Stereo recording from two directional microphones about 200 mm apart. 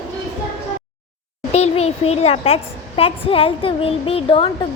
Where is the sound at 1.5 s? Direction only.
30° left (ahead or behind).